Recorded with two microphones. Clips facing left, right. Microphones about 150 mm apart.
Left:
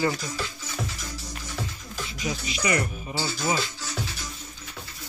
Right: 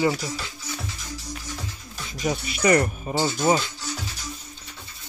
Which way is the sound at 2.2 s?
50° right (ahead or behind).